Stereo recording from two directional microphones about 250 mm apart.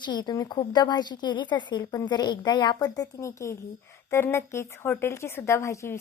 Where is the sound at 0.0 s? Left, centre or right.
Centre.